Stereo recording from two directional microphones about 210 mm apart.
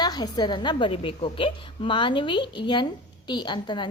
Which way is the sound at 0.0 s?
20° left (ahead or behind).